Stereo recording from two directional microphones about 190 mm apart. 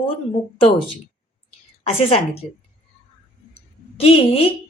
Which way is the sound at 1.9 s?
30° left (ahead or behind).